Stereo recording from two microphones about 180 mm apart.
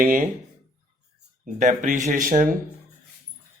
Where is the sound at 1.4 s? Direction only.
45° right (ahead or behind).